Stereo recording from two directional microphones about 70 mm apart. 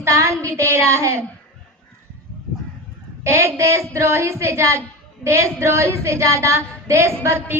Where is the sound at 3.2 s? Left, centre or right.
Right.